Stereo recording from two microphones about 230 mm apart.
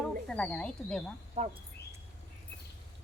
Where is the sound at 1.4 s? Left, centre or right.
Right.